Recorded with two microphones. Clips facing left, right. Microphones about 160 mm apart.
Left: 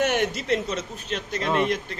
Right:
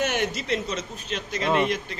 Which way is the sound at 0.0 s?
55° left (ahead or behind).